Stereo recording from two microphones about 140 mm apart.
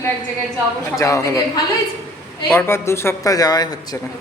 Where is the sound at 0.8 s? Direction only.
20° left (ahead or behind).